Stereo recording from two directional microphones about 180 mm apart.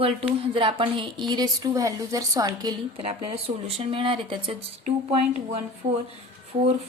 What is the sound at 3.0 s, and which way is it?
Speech, 35° right (ahead or behind).